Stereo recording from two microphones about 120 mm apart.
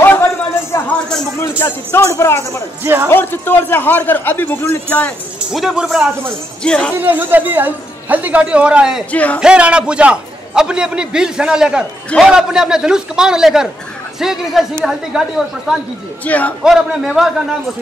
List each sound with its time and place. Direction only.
0.0 s a sound: 20° left (ahead or behind)
1.6 s speech: 20° left (ahead or behind)
2.8 s speech: 20° right (ahead or behind)
3.1 s a man's voice: 15° left (ahead or behind)
5.5 s a man's voice: 5° right (ahead or behind)
6.6 s a man's voice: 10° left (ahead or behind)
7.0 s a man's voice: 15° right (ahead or behind)
9.1 s a man's voice: 10° left (ahead or behind)
9.4 s a man's voice: 10° right (ahead or behind)
16.3 s a man's voice: 15° left (ahead or behind)
16.6 s a man's voice: 5° right (ahead or behind)